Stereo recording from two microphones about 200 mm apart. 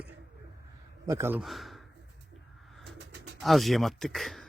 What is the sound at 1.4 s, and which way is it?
Speech, centre (ahead or behind).